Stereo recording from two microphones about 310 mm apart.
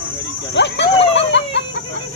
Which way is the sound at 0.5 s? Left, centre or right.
Left.